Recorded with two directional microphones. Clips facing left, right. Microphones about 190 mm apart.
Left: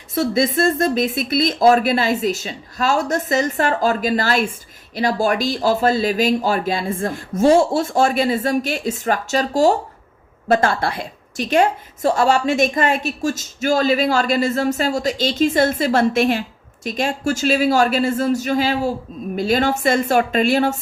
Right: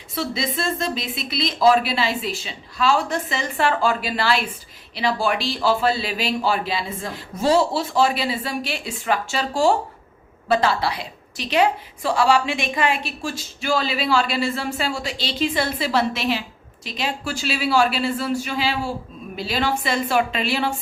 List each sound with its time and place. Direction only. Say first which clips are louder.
0.1 s a woman's voice: left 8 dB; 45° left (ahead or behind)